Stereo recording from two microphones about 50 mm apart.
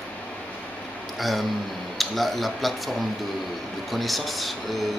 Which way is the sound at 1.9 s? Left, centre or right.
Centre.